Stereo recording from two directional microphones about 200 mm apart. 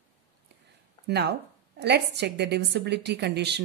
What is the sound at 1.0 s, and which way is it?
Speech, 55° right (ahead or behind).